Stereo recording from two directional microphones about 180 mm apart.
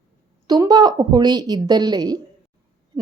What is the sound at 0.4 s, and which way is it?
A woman's voice, 20° right (ahead or behind).